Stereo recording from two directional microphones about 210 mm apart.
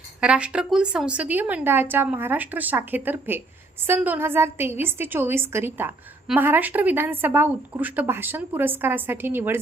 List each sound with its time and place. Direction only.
0.2 s a woman's voice: 5° right (ahead or behind)